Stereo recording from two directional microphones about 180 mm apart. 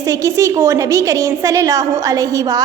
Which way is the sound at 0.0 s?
15° right (ahead or behind).